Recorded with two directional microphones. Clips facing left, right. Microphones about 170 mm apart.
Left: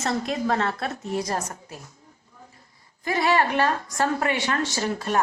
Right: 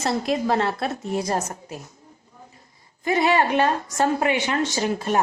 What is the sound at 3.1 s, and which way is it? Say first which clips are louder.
A woman's voice: right 2 dB; 20° right (ahead or behind).